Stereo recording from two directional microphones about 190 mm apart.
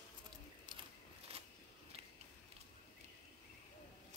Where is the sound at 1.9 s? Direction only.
30° right (ahead or behind).